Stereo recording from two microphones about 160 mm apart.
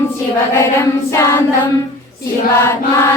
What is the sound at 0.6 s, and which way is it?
Chant, 15° left (ahead or behind).